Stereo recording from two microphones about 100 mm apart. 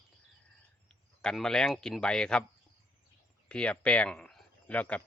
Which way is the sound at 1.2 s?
5° left (ahead or behind).